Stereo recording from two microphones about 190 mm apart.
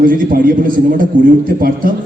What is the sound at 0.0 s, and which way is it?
A man's voice, 50° right (ahead or behind).